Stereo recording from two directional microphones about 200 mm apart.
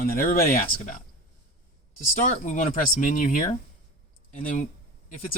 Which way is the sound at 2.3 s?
40° left (ahead or behind).